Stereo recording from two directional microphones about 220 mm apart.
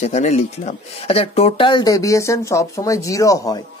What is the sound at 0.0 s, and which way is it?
Speech, 30° left (ahead or behind).